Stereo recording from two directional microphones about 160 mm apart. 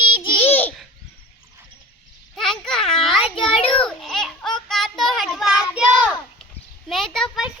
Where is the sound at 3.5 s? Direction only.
35° left (ahead or behind).